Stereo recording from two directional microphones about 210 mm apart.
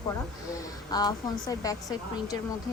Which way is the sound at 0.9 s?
20° left (ahead or behind).